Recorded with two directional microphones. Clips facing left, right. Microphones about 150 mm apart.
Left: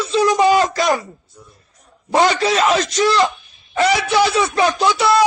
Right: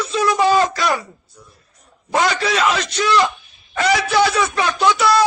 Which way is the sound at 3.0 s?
30° left (ahead or behind).